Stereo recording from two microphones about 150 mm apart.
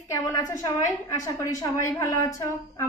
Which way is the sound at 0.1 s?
20° left (ahead or behind).